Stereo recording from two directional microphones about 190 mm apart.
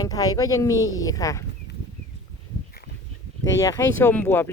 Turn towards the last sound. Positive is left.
turn(degrees=10)  # may be behind; listen again after turning